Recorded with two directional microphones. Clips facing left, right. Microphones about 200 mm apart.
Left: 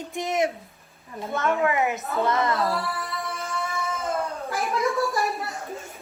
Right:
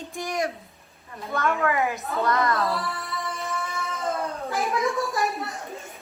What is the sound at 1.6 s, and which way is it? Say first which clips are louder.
Speech: left 1 dB; 20° left (ahead or behind).